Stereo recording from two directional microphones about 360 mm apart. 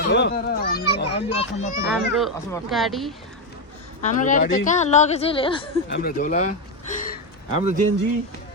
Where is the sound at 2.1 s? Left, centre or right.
Centre.